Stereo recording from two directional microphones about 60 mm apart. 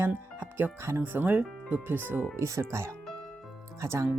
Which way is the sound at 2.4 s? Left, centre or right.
Right.